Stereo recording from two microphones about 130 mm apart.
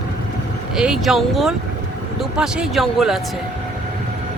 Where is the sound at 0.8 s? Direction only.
5° right (ahead or behind).